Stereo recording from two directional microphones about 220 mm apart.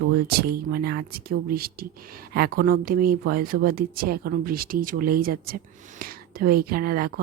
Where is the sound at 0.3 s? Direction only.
45° right (ahead or behind).